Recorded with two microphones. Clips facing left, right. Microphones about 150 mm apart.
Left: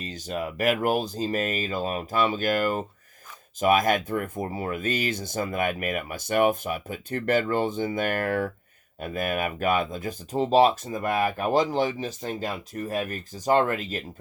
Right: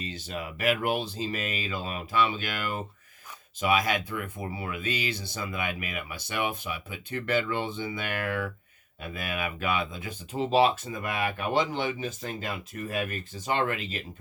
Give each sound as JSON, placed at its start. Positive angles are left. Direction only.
{"t": 0.0, "sound": "speech", "side_deg": 45}